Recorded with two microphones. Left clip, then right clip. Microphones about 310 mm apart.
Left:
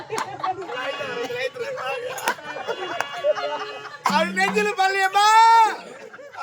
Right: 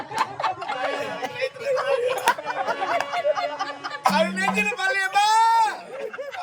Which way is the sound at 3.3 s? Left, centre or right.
Right.